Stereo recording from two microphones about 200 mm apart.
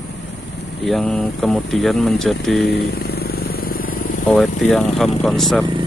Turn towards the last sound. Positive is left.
turn(degrees=0)  # may be behind; listen again after turning